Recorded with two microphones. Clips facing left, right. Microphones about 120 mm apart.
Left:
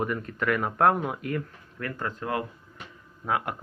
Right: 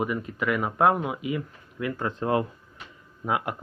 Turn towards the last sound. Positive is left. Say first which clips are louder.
# right 1 dB
turn(degrees=-10)  # may be behind; listen again after turning